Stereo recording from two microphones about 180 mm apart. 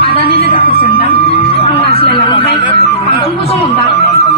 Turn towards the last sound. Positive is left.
turn(degrees=30)  # may be behind; listen again after turning